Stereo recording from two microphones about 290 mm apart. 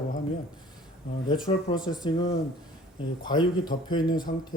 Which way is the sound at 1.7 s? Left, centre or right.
Centre.